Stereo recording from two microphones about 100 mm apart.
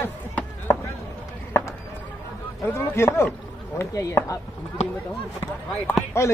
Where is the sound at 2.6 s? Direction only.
25° left (ahead or behind).